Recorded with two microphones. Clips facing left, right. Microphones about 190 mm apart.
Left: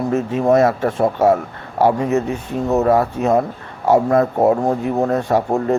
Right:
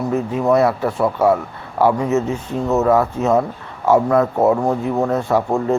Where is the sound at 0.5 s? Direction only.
45° left (ahead or behind).